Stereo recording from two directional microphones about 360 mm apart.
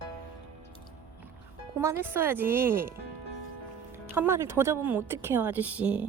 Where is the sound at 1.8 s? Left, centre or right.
Centre.